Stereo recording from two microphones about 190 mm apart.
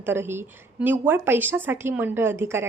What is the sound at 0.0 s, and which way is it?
A woman's voice, 10° right (ahead or behind).